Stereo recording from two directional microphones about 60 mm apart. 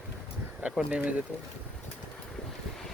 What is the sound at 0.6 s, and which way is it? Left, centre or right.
Speech, right.